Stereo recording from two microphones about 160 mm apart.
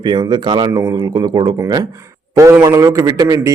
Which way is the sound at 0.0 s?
25° right (ahead or behind).